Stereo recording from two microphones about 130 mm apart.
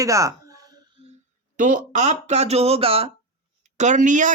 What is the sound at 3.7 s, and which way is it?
Speech, 70° right (ahead or behind).